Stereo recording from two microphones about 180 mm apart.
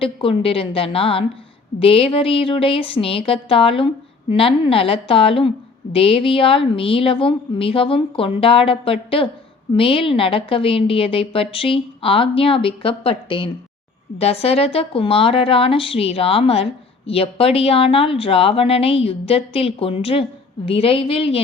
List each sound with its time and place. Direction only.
0.0 s a woman's voice: 30° left (ahead or behind)